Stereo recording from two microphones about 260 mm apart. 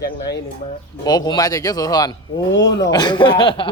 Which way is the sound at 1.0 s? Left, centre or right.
Centre.